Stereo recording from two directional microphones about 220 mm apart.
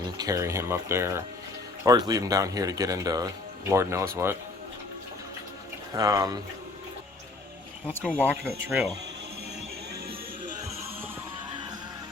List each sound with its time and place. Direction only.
0.2 s speech: 15° right (ahead or behind)
5.9 s speech: 15° right (ahead or behind)
8.2 s speech: 10° right (ahead or behind)